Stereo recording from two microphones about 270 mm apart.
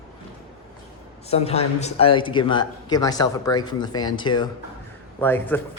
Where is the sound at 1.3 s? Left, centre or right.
Left.